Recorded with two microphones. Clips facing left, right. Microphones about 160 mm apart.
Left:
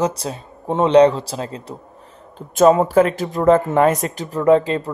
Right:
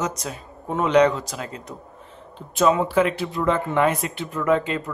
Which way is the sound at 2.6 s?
45° left (ahead or behind).